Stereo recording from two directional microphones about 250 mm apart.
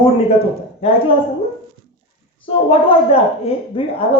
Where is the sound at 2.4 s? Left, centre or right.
Left.